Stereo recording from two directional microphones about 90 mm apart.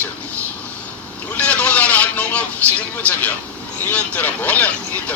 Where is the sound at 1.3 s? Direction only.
15° left (ahead or behind).